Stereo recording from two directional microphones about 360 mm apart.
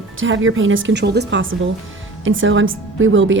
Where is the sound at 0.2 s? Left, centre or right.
Right.